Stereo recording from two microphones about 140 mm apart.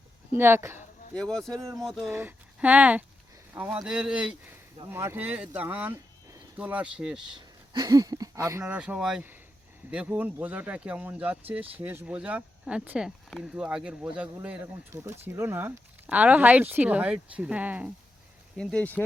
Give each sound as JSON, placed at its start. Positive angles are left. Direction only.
{"t": 0.3, "sound": "speech", "side_deg": -15}
{"t": 1.1, "sound": "speech", "side_deg": 5}
{"t": 2.0, "sound": "speech", "side_deg": -15}
{"t": 4.9, "sound": "speech", "side_deg": -20}
{"t": 7.3, "sound": "speech", "side_deg": -30}
{"t": 8.6, "sound": "speech", "side_deg": -10}
{"t": 18.5, "sound": "speech", "side_deg": 5}